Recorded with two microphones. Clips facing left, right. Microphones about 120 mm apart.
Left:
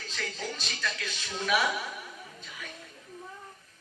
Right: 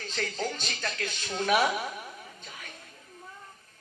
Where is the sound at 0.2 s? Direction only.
50° right (ahead or behind).